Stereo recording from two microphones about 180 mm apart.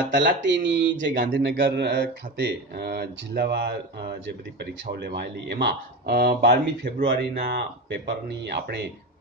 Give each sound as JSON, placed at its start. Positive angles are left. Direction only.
{"t": 0.1, "sound": "speech", "side_deg": -80}